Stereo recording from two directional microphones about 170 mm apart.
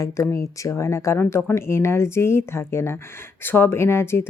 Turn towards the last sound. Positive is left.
turn(degrees=15)  # may be behind; listen again after turning